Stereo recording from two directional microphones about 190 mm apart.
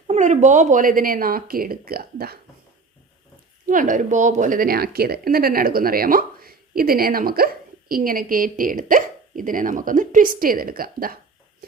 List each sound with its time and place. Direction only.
0.1 s speech: 40° right (ahead or behind); by 2.4 s 55° right (ahead or behind)
3.7 s speech: 45° right (ahead or behind)